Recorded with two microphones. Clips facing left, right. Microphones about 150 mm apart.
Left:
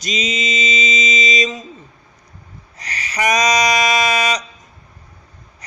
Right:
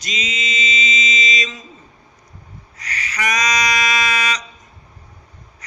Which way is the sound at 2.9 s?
20° left (ahead or behind).